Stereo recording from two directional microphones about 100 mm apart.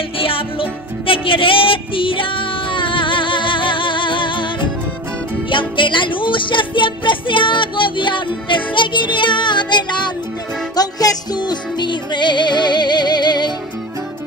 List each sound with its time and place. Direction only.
0.2 s music: 65° left (ahead or behind); by 13.5 s 45° left (ahead or behind)